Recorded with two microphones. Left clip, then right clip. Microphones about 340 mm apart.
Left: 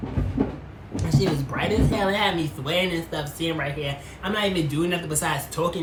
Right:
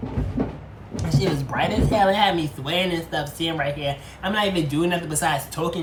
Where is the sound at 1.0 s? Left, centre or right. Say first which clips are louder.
Even; centre.